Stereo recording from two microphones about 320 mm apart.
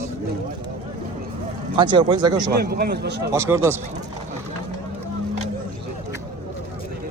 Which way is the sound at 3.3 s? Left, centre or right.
Centre.